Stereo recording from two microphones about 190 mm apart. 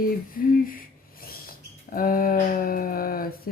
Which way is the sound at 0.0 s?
50° left (ahead or behind).